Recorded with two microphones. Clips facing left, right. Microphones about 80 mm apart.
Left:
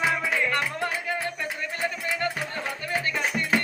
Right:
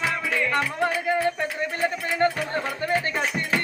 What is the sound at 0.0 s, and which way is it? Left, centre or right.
Music, centre.